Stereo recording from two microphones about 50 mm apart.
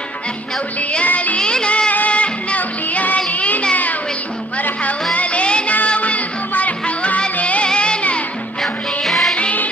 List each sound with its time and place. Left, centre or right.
1.0 s music: left
1.4 s music: centre
1.9 s music: left
5.1 s music: left
9.0 s music: centre
9.3 s music: left